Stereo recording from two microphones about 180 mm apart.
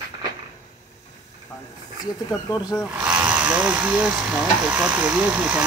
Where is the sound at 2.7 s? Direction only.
5° right (ahead or behind).